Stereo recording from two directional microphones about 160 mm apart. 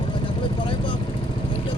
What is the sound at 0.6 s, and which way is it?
Vehicle, 30° left (ahead or behind).